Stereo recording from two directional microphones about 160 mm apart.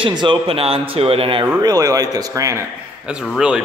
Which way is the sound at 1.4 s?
20° right (ahead or behind).